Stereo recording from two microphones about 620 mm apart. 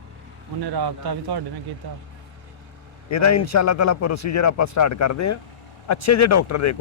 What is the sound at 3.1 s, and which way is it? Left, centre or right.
A man's voice, left.